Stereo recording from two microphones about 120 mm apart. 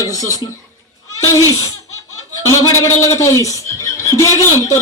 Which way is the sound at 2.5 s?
25° left (ahead or behind).